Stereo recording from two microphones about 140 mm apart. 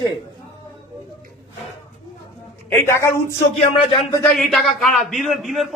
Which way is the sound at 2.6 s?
20° left (ahead or behind).